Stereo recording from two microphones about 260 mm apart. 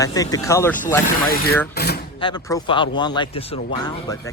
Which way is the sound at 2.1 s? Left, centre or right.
Centre.